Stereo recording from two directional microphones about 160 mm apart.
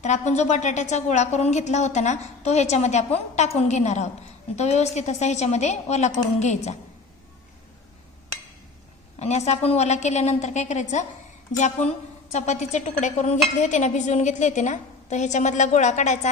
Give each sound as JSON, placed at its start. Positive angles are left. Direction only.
{"t": 0.0, "sound": "a woman's voice", "side_deg": 45}
{"t": 9.2, "sound": "a woman's voice", "side_deg": 45}